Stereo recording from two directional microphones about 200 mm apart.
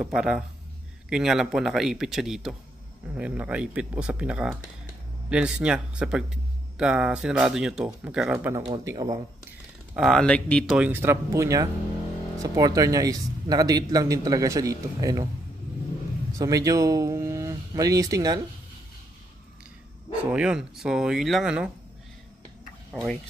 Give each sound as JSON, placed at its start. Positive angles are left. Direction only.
{"t": 0.0, "sound": "speech", "side_deg": -5}
{"t": 8.6, "sound": "speech", "side_deg": -20}
{"t": 9.9, "sound": "speech", "side_deg": 0}
{"t": 10.8, "sound": "speech", "side_deg": -10}
{"t": 16.3, "sound": "speech", "side_deg": -15}
{"t": 20.2, "sound": "speech", "side_deg": -5}